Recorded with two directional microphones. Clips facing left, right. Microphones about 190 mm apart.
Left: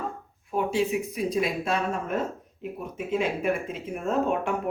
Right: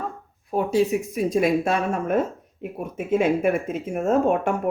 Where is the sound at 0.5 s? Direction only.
40° right (ahead or behind).